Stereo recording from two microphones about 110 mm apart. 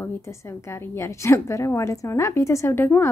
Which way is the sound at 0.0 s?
25° left (ahead or behind).